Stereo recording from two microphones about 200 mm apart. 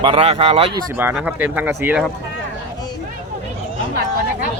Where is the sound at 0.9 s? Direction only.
10° right (ahead or behind).